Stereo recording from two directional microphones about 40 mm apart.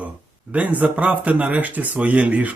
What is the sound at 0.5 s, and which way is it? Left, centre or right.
Speech, right.